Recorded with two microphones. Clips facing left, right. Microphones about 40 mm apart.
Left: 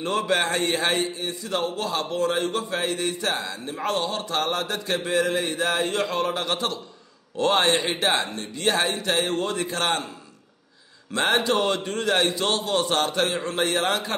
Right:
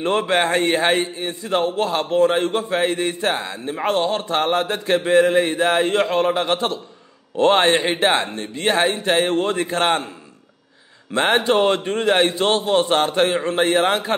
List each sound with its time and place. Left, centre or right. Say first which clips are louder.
0.0 s a man's voice: right 5 dB; right
11.1 s a man's voice: right 4 dB; right